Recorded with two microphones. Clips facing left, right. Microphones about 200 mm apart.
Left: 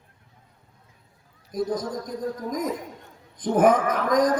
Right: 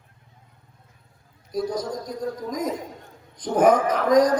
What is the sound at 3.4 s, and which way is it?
Speech, 50° left (ahead or behind).